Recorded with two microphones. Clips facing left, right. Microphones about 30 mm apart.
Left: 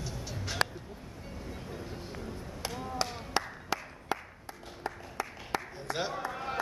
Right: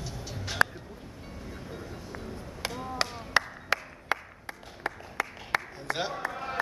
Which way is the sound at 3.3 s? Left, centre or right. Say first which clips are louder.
Right 6 dB; right.